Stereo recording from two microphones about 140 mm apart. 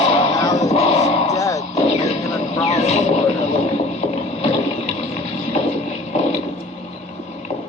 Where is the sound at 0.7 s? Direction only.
50° left (ahead or behind).